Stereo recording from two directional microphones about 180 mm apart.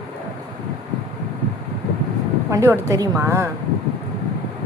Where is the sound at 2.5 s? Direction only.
15° right (ahead or behind).